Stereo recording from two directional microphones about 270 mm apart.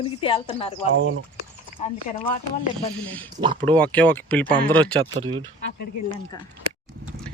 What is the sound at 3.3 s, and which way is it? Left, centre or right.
Speech, centre.